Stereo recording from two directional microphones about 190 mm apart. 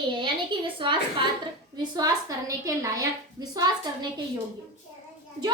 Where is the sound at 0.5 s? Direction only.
25° right (ahead or behind).